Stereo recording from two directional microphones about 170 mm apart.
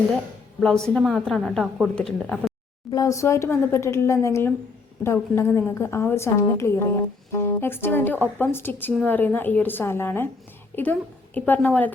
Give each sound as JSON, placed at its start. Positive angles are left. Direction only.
{"t": 0.6, "sound": "a woman's voice", "side_deg": 5}
{"t": 2.9, "sound": "a woman's voice", "side_deg": 20}
{"t": 11.3, "sound": "a woman's voice", "side_deg": 10}